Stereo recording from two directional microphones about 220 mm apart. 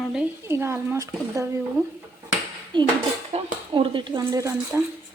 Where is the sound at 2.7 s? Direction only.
20° right (ahead or behind).